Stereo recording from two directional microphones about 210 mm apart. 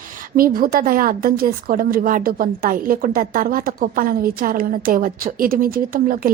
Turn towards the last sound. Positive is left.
turn(degrees=-40)  # may be behind; listen again after turning